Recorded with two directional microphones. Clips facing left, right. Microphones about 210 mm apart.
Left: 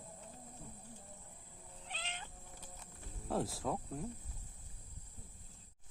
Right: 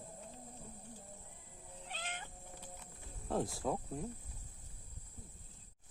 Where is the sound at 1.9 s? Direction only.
50° right (ahead or behind).